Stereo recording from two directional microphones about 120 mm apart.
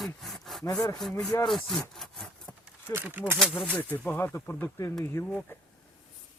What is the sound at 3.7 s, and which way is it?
Speech, 15° left (ahead or behind).